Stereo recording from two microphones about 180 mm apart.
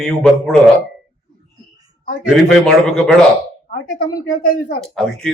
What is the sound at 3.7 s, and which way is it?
Speech, 55° left (ahead or behind).